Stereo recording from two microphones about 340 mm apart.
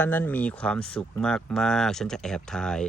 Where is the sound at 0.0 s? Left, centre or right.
Centre.